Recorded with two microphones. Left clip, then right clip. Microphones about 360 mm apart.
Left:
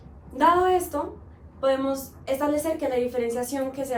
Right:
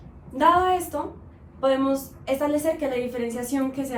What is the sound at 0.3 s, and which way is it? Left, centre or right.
A woman's voice, centre.